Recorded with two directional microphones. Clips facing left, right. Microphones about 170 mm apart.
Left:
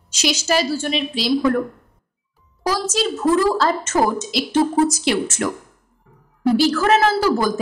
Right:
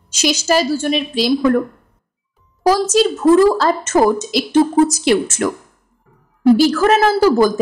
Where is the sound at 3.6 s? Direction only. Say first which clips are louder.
Right 4 dB; 50° right (ahead or behind).